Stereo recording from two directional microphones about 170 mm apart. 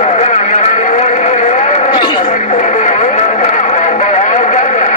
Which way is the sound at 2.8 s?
45° left (ahead or behind).